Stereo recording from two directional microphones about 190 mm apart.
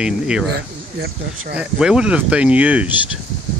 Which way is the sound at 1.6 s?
5° right (ahead or behind).